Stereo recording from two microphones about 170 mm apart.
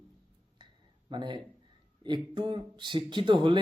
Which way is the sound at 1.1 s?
25° right (ahead or behind).